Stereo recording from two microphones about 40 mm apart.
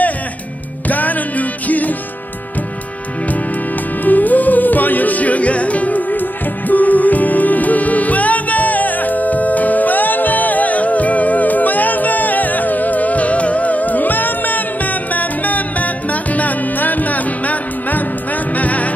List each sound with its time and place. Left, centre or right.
0.8 s music: left
4.0 s music: left